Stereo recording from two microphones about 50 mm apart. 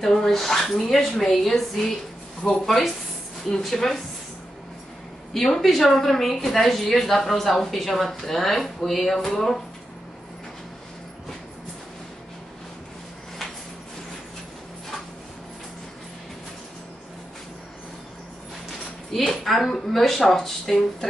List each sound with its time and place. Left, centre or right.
0.0 s a woman's voice: centre
5.3 s a woman's voice: centre
19.1 s a woman's voice: centre